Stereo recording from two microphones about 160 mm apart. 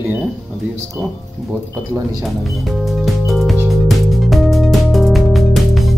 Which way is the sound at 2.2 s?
Centre (ahead or behind).